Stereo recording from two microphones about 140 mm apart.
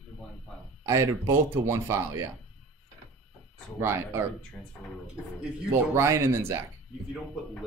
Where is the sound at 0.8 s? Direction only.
20° right (ahead or behind).